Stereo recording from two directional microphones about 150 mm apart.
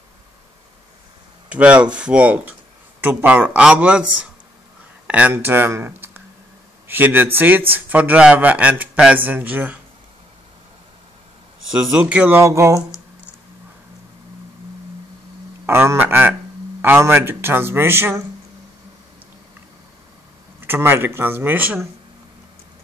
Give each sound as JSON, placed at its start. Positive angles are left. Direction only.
{"t": 1.5, "sound": "speech", "side_deg": -10}
{"t": 5.0, "sound": "a man's voice", "side_deg": -10}
{"t": 11.7, "sound": "speech", "side_deg": -5}
{"t": 15.6, "sound": "speech", "side_deg": -15}
{"t": 20.6, "sound": "speech", "side_deg": -15}